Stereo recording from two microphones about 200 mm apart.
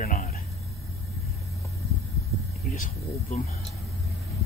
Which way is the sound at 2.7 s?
40° left (ahead or behind).